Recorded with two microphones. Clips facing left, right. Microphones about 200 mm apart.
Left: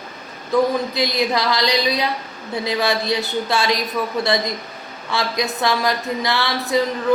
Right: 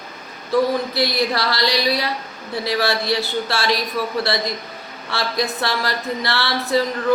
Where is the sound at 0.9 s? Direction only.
15° left (ahead or behind).